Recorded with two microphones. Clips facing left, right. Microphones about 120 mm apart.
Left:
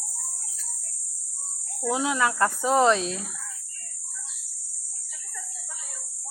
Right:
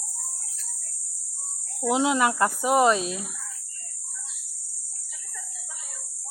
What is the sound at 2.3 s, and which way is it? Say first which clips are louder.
Speech: even; 10° right (ahead or behind).